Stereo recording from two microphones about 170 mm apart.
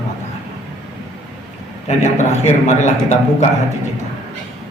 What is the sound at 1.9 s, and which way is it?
A man's voice, 40° left (ahead or behind).